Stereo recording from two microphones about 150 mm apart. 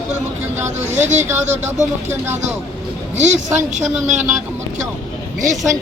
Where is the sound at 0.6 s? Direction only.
15° right (ahead or behind).